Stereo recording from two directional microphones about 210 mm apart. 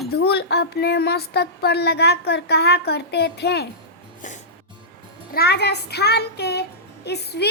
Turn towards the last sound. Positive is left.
turn(degrees=50)  # may be behind; listen again after turning